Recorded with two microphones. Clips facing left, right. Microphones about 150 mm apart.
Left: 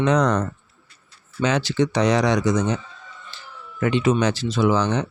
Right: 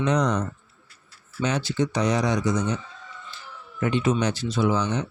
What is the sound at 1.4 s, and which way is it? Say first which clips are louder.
Speech: left 4 dB; 90° left.